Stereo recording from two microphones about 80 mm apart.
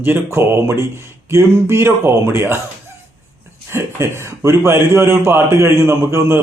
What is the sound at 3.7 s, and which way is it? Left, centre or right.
A man's voice, right.